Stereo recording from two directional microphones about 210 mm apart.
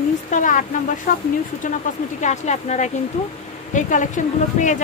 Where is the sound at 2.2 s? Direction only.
35° left (ahead or behind).